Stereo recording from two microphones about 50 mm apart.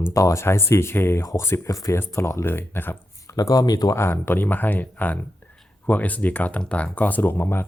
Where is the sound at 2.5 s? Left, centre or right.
Left.